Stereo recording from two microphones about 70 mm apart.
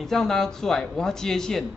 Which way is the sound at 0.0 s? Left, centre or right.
Centre.